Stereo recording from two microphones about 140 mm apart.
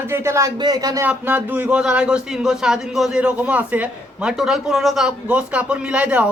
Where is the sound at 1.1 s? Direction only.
10° right (ahead or behind).